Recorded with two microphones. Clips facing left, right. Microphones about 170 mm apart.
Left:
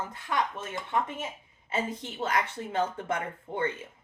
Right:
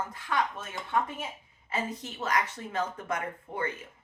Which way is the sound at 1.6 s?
25° left (ahead or behind).